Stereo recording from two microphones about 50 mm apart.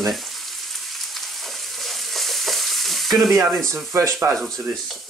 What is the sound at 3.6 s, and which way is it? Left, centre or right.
Speech, right.